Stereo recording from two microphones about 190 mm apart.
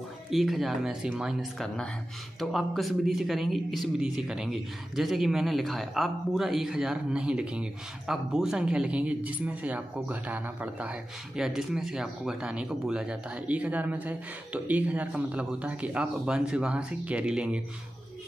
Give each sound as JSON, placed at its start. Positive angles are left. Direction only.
{"t": 0.3, "sound": "speech", "side_deg": 0}